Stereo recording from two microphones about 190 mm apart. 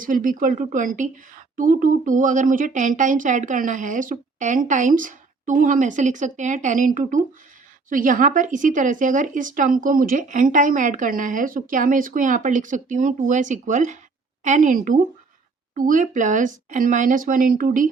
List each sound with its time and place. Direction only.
0.0 s speech: 45° right (ahead or behind)